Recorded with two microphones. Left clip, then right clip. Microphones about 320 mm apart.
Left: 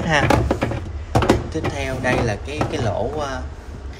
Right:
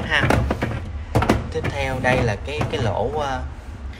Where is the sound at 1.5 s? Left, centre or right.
Centre.